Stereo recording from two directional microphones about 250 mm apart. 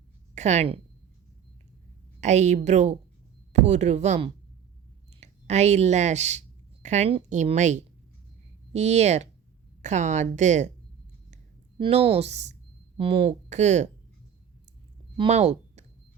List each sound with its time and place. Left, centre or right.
0.3 s a woman's voice: right
2.2 s speech: right
11.8 s speech: right
15.1 s speech: right